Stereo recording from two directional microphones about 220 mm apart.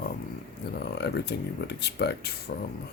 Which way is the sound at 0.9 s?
50° left (ahead or behind).